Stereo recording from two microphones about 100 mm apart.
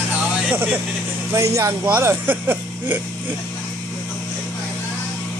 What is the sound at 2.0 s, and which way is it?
Speech, 20° right (ahead or behind).